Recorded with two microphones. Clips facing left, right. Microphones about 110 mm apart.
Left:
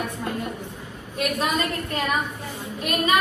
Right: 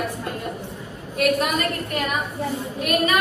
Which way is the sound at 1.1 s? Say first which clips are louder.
Right 4 dB; 30° left (ahead or behind).